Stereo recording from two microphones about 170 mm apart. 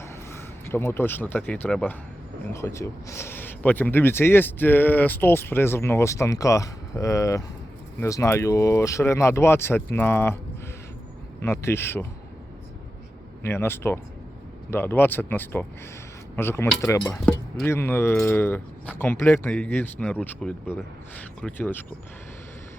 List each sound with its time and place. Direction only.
0.0 s speech: 15° left (ahead or behind)
11.3 s speech: 15° left (ahead or behind)
13.4 s speech: 15° left (ahead or behind)